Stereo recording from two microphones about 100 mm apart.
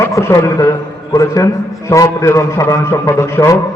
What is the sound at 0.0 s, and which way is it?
A man's voice, 30° left (ahead or behind).